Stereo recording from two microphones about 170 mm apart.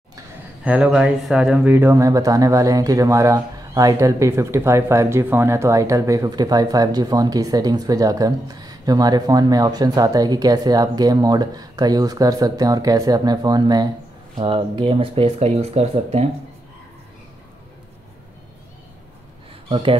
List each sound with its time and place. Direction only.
0.7 s speech: 5° right (ahead or behind); by 16.3 s 40° right (ahead or behind)
19.7 s speech: 30° right (ahead or behind)